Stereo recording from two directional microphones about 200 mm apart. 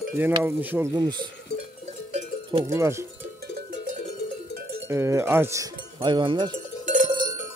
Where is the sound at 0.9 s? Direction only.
20° right (ahead or behind).